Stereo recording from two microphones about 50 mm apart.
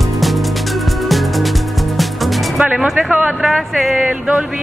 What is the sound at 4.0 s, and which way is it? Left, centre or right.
Speech, centre.